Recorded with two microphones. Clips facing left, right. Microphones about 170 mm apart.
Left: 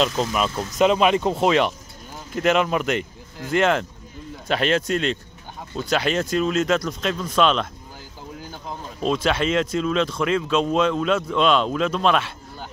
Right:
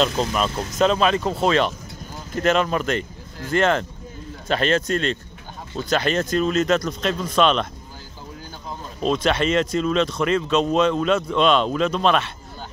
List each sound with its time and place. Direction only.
0.7 s speech: 15° left (ahead or behind)
9.0 s speech: 5° left (ahead or behind)